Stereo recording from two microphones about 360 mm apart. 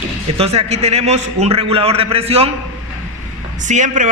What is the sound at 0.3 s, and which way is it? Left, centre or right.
A man's voice, centre.